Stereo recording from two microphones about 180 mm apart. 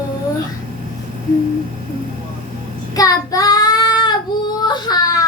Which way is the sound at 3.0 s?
20° left (ahead or behind).